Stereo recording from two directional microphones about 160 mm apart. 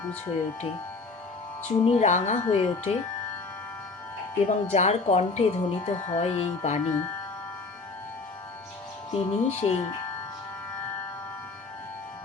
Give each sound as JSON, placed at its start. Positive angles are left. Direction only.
{"t": 1.6, "sound": "speech", "side_deg": 40}
{"t": 4.4, "sound": "speech", "side_deg": 45}
{"t": 9.1, "sound": "speech", "side_deg": 40}